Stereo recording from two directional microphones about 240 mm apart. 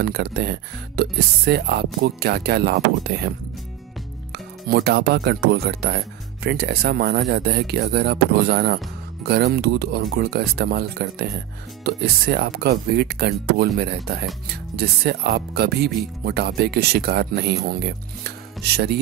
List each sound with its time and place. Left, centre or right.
0.0 s speech: right
4.6 s speech: right